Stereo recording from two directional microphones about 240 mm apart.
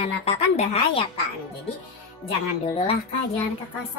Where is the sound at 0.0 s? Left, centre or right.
Left.